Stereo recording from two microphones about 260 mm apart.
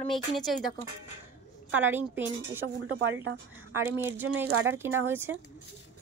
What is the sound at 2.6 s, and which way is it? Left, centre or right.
Speech, right.